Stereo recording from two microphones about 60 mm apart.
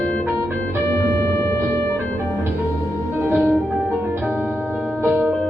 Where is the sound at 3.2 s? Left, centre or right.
Right.